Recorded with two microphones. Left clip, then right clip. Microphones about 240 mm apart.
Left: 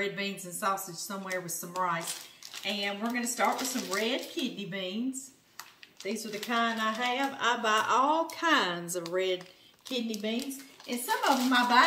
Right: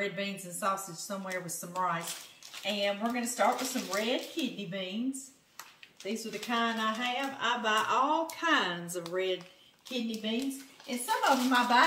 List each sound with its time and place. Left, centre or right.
0.0 s speech: centre
6.0 s speech: centre
11.1 s speech: centre